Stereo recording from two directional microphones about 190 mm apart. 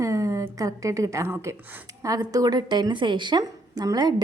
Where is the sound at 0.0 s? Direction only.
15° right (ahead or behind).